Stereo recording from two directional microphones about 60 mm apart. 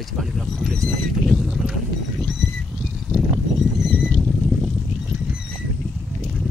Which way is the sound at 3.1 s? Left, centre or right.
Centre.